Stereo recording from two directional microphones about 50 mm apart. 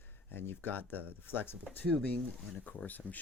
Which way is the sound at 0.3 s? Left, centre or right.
Left.